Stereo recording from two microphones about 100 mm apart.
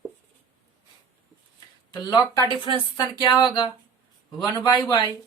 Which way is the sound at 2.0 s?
45° left (ahead or behind).